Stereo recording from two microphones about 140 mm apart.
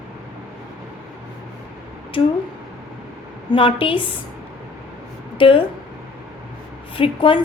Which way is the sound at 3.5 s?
40° left (ahead or behind).